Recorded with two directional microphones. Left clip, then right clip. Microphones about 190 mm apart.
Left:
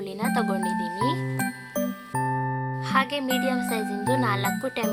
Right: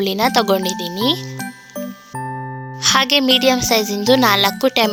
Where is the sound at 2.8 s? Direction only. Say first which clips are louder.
Right 11 dB; 50° right (ahead or behind).